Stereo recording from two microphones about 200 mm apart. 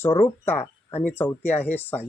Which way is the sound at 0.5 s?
30° left (ahead or behind).